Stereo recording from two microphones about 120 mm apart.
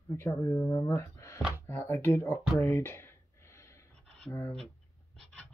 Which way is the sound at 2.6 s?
20° left (ahead or behind).